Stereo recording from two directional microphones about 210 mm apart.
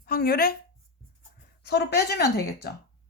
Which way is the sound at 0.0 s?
45° left (ahead or behind).